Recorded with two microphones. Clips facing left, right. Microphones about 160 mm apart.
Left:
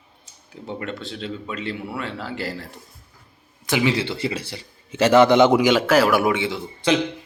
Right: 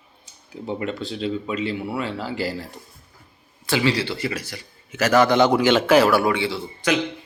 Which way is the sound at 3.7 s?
20° left (ahead or behind).